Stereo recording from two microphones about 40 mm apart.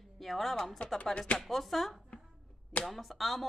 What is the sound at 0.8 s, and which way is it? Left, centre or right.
Speech, left.